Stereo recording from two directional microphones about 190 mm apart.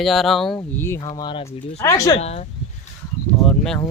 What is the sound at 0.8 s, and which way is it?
Speech, 15° left (ahead or behind).